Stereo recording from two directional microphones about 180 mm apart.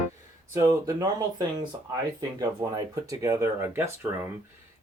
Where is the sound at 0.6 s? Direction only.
20° right (ahead or behind).